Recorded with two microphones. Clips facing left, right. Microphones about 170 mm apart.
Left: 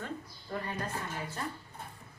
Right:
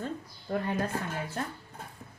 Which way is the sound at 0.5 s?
40° right (ahead or behind).